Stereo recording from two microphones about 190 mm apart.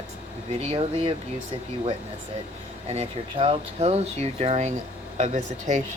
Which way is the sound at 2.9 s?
30° right (ahead or behind).